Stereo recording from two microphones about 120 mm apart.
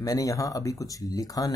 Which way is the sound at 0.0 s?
30° left (ahead or behind).